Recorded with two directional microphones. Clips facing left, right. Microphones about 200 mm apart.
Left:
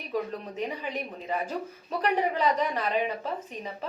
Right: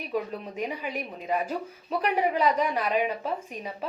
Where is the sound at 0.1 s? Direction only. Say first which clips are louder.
Even; 10° right (ahead or behind).